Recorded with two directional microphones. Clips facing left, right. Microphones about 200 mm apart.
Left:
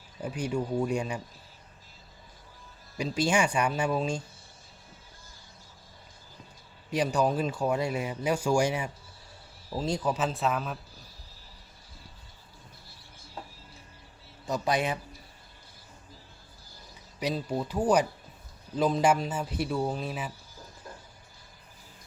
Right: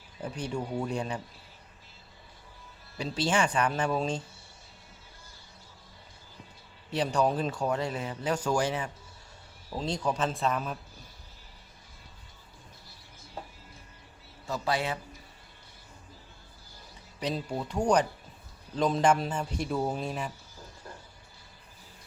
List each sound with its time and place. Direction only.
0.2 s speech: 10° left (ahead or behind)
3.0 s speech: 10° left (ahead or behind)
6.9 s speech: 10° left (ahead or behind)
14.4 s speech: 15° left (ahead or behind)
17.2 s speech: 10° left (ahead or behind)